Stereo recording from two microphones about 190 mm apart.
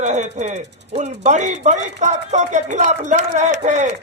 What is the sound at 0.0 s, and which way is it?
Speech, 35° right (ahead or behind).